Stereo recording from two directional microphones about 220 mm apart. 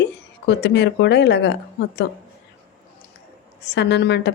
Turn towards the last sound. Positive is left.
turn(degrees=50)  # may be behind; listen again after turning